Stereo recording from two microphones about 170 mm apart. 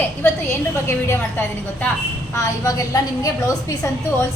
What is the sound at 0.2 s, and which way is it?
A woman's voice, 15° left (ahead or behind).